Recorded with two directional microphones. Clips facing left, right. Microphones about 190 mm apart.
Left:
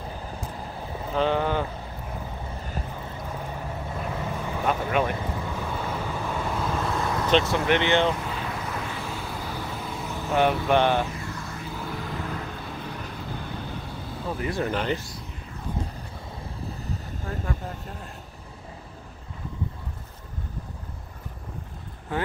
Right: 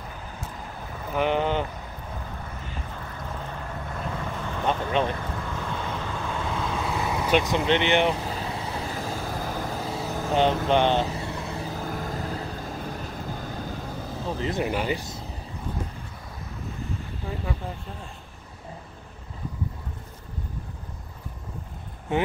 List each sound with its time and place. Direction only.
1.1 s speech: 15° right (ahead or behind)
2.9 s boat: 15° left (ahead or behind)
5.2 s vehicle: 10° left (ahead or behind); by 8.2 s 20° right (ahead or behind)
8.2 s vehicle: 35° right (ahead or behind)
10.7 s vehicle: 20° right (ahead or behind)
11.6 s vehicle: 40° right (ahead or behind)
14.4 s speech: 20° right (ahead or behind)
14.7 s speech: 10° right (ahead or behind)
22.1 s speech: 25° right (ahead or behind)